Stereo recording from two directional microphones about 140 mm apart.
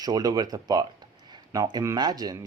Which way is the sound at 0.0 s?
25° right (ahead or behind).